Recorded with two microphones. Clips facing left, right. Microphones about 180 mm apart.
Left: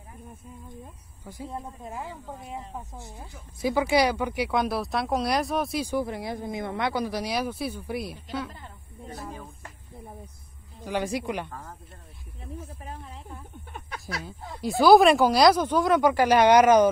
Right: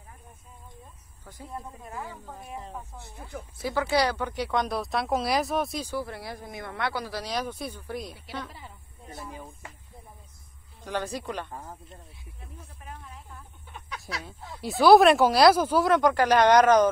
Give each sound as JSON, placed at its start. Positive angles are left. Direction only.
{"t": 1.5, "sound": "speech", "side_deg": 15}
{"t": 5.9, "sound": "speech", "side_deg": 15}
{"t": 8.4, "sound": "speech", "side_deg": 0}
{"t": 9.1, "sound": "a sound", "side_deg": -15}
{"t": 10.9, "sound": "speech", "side_deg": 10}
{"t": 12.8, "sound": "snake", "side_deg": 30}
{"t": 13.7, "sound": "a sound", "side_deg": 50}
{"t": 14.6, "sound": "speech", "side_deg": 0}